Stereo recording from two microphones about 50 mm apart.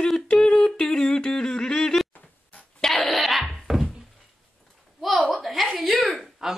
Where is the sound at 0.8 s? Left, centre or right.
Centre.